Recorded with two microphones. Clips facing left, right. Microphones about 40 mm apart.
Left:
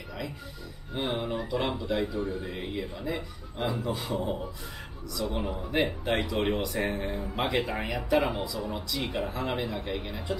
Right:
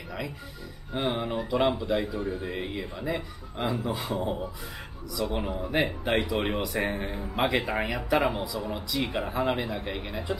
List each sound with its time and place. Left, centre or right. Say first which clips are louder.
0.9 s speech: right 2 dB; centre